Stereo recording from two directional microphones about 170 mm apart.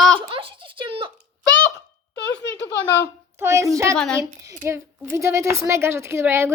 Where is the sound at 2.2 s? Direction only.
85° left.